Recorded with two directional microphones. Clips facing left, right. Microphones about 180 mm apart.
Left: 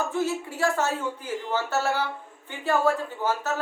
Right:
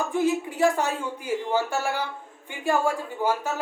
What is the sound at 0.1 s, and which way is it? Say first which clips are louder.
Speech: right 3 dB; 15° right (ahead or behind).